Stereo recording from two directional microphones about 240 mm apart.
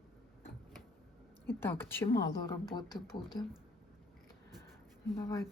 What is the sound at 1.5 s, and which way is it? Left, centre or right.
Speech, centre.